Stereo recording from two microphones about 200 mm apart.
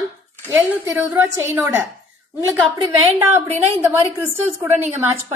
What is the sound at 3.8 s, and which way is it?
Speech, 10° right (ahead or behind).